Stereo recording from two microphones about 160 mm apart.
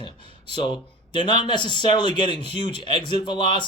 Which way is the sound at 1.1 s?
30° left (ahead or behind).